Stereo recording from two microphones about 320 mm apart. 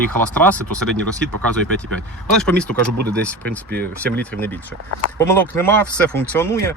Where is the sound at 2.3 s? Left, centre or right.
Centre.